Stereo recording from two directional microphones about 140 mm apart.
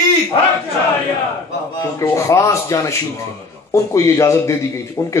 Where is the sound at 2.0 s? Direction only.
20° left (ahead or behind).